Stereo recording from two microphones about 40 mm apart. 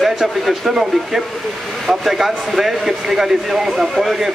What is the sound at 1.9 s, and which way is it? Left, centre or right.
Speech, centre.